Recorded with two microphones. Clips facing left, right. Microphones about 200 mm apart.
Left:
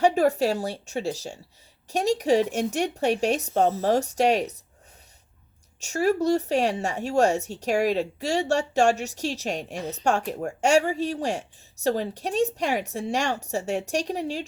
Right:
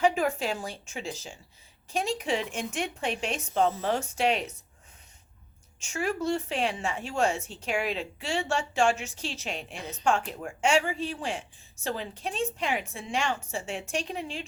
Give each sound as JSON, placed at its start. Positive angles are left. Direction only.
{"t": 0.0, "sound": "speech", "side_deg": 40}
{"t": 5.8, "sound": "speech", "side_deg": 40}